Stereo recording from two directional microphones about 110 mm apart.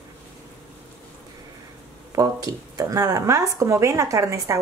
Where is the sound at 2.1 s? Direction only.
35° right (ahead or behind).